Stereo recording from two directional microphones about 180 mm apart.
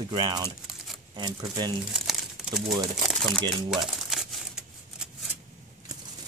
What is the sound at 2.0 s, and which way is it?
Crumpling, centre (ahead or behind).